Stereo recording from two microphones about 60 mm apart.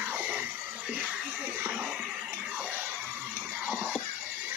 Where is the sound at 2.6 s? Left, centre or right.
Right.